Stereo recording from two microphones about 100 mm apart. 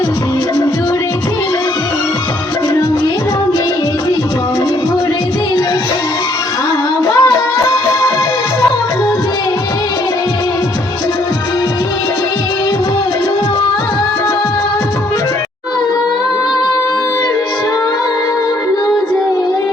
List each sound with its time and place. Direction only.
7.1 s music: 40° left (ahead or behind)